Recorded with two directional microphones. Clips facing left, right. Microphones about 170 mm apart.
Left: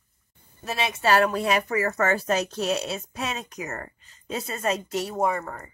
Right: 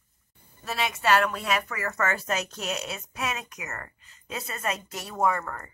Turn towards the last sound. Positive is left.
turn(degrees=15)  # may be behind; listen again after turning